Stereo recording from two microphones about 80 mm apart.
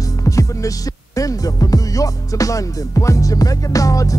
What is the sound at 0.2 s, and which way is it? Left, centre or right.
Music, left.